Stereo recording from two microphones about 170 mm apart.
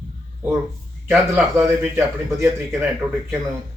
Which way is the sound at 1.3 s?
15° right (ahead or behind).